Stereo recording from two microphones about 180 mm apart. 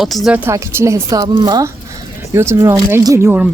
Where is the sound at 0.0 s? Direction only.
Centre (ahead or behind).